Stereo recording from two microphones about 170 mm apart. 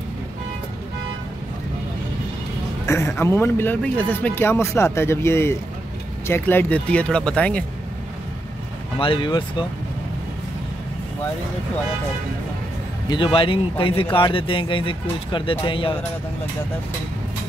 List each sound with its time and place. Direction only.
2.9 s speech: 15° left (ahead or behind)
8.9 s speech: 30° left (ahead or behind)
13.1 s speech: 30° left (ahead or behind)